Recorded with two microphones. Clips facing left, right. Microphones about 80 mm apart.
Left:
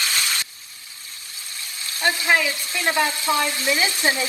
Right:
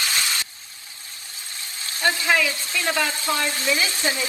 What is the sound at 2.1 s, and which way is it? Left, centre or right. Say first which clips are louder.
Speech: left 1 dB; left.